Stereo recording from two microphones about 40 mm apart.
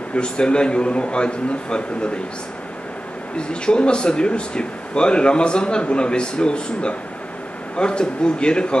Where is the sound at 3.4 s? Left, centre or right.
Left.